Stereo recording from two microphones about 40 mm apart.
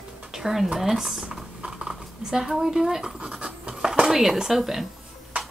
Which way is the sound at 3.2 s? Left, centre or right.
Right.